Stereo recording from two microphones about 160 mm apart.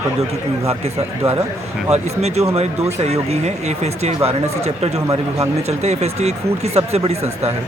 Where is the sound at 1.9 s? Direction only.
45° right (ahead or behind).